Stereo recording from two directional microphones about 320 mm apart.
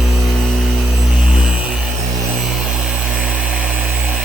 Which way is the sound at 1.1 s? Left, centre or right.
Centre.